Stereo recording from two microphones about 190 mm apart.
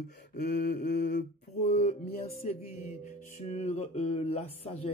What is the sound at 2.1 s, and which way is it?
Speech, 50° left (ahead or behind).